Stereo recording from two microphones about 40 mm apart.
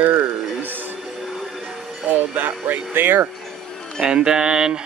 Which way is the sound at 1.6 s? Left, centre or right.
Centre.